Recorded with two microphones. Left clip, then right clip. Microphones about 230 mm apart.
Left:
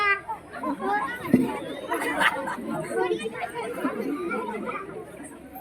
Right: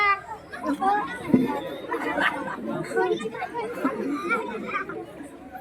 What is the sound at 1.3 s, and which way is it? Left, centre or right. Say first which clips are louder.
Speech: right 2 dB; left.